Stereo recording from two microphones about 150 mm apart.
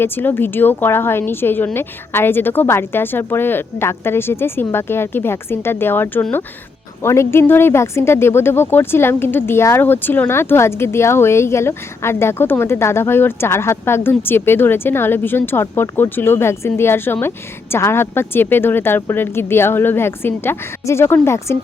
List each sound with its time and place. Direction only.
0.0 s speech: 15° left (ahead or behind)